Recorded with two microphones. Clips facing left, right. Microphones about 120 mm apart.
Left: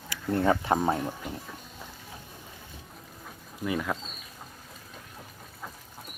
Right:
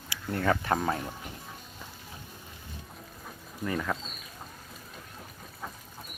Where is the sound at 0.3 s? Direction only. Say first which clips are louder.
Left 3 dB; 25° left (ahead or behind).